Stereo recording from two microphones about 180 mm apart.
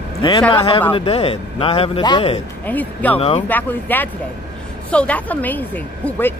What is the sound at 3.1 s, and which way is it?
Speech, 30° left (ahead or behind).